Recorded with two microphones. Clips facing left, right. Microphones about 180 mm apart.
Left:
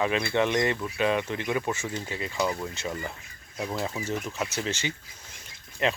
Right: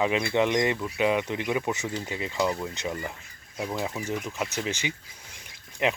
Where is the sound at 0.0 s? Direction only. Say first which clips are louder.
Right 1 dB; 15° right (ahead or behind).